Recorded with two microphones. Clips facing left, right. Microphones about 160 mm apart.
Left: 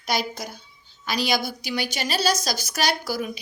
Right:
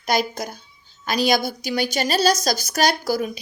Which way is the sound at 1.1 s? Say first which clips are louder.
Right 5 dB; 45° right (ahead or behind).